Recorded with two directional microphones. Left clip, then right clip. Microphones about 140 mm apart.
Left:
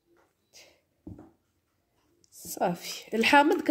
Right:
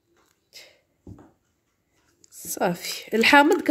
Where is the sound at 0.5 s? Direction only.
35° right (ahead or behind).